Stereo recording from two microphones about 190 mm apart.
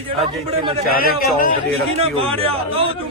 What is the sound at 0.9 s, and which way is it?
Speech, 50° left (ahead or behind).